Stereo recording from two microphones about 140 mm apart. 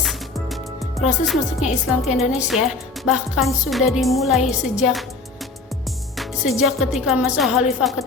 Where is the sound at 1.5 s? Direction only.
55° left (ahead or behind).